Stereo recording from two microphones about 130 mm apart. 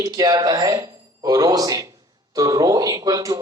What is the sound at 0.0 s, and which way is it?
A man's voice, 30° right (ahead or behind).